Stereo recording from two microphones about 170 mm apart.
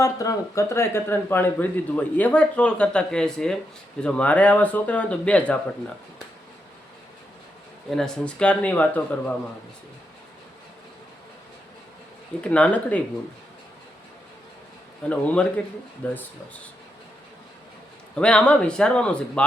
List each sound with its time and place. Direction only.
0.0 s speech: 20° left (ahead or behind)
7.9 s speech: 5° left (ahead or behind)
12.4 s speech: 10° left (ahead or behind)
15.1 s speech: 10° left (ahead or behind)
18.2 s speech: 5° left (ahead or behind)